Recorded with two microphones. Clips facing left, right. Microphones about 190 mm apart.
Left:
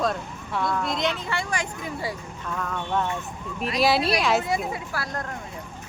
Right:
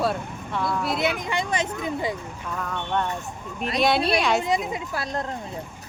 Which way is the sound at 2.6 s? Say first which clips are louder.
Even; centre (ahead or behind).